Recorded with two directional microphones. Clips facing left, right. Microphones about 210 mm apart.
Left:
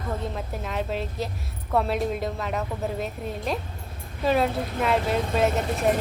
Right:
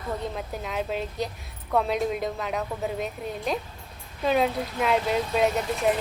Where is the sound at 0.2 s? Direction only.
Centre (ahead or behind).